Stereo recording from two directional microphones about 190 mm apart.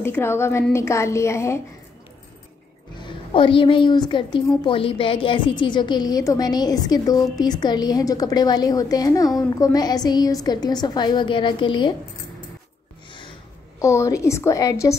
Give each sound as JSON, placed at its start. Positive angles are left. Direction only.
{"t": 0.0, "sound": "a woman's voice", "side_deg": 15}
{"t": 3.0, "sound": "a woman's voice", "side_deg": 25}
{"t": 13.7, "sound": "a woman's voice", "side_deg": 15}